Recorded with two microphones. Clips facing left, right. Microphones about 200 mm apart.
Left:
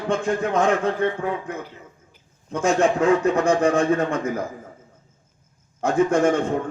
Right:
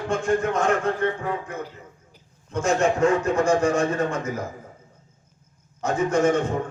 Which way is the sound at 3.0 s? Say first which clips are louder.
Left 2 dB; 60° left (ahead or behind).